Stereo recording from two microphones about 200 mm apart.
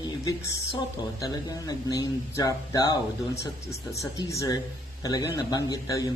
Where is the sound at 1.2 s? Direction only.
20° left (ahead or behind).